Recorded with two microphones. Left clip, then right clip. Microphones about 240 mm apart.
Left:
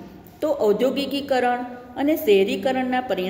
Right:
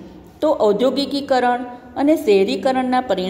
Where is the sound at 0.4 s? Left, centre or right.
Centre.